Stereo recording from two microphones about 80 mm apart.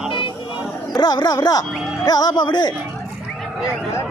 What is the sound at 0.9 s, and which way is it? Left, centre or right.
Speech, left.